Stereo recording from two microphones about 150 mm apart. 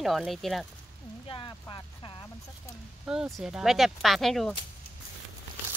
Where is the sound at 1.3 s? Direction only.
30° left (ahead or behind).